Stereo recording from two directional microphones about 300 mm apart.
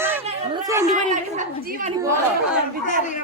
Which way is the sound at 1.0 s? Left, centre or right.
Right.